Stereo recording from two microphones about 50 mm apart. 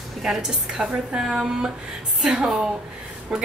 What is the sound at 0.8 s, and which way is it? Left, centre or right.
Speech, right.